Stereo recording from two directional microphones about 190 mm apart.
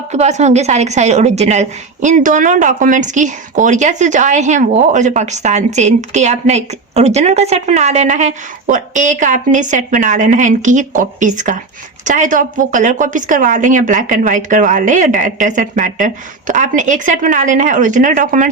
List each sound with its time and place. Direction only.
0.1 s a woman's voice: 35° right (ahead or behind)